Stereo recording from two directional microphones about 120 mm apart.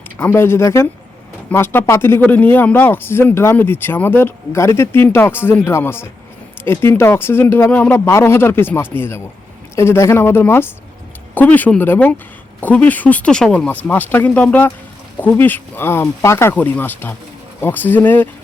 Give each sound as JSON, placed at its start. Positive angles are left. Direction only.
{"t": 0.2, "sound": "a man's voice", "side_deg": 20}